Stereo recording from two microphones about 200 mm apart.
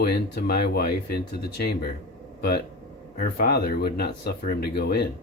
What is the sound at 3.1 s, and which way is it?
Speech, 45° left (ahead or behind).